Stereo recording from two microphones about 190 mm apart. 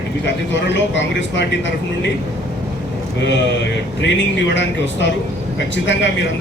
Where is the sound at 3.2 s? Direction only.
70° left (ahead or behind).